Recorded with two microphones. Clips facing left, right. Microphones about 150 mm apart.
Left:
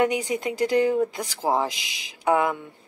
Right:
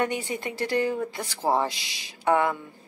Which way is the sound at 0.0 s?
15° left (ahead or behind).